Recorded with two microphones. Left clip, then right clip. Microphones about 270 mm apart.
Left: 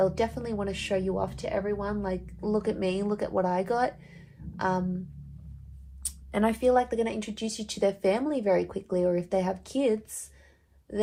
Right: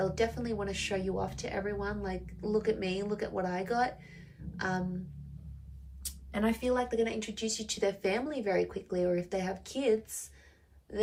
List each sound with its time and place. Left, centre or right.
0.0 s speech: centre
6.1 s speech: centre
6.9 s speech: centre